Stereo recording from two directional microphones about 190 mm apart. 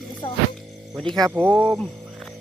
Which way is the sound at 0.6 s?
Centre (ahead or behind).